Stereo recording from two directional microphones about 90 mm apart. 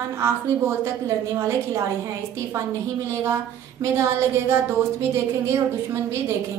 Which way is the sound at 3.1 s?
30° right (ahead or behind).